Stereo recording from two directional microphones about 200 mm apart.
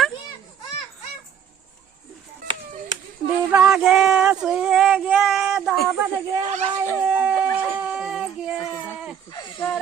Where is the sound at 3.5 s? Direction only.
5° right (ahead or behind).